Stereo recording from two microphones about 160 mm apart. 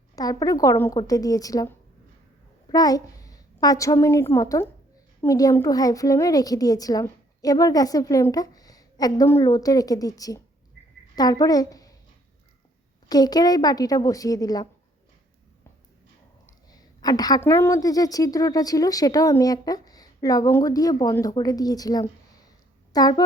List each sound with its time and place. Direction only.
0.2 s a woman's voice: 20° left (ahead or behind)
2.7 s a child's voice: 25° left (ahead or behind)
13.1 s a woman's voice: 25° left (ahead or behind)
16.5 s a woman's voice: 25° left (ahead or behind)